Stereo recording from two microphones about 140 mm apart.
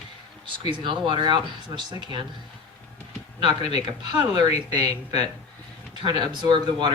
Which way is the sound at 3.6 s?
50° left (ahead or behind).